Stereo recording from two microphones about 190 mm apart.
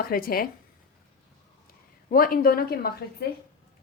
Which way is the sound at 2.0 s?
50° left (ahead or behind).